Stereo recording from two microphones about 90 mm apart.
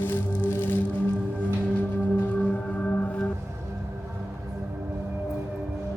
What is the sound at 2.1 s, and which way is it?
Music, 20° left (ahead or behind).